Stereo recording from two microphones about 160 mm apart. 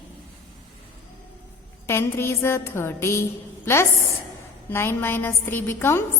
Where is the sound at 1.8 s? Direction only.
15° left (ahead or behind).